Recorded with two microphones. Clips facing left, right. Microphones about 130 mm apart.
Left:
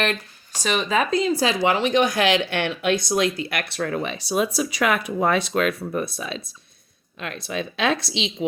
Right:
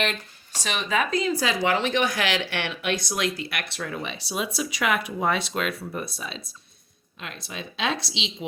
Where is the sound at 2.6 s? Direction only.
45° left (ahead or behind).